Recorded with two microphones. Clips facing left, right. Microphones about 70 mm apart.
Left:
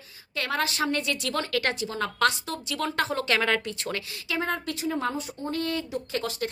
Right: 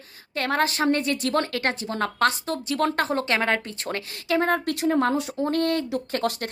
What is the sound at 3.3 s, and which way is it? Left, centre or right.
Speech, right.